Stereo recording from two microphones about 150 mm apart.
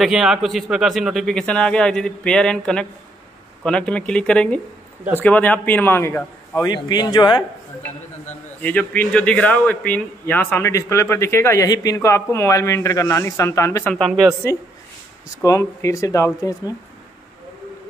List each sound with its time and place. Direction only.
0.0 s speech: centre (ahead or behind); by 6.2 s 15° left (ahead or behind)
6.6 s speech: 30° left (ahead or behind)
8.6 s speech: 10° left (ahead or behind)
13.8 s speech: 5° left (ahead or behind)
15.4 s speech: 20° left (ahead or behind)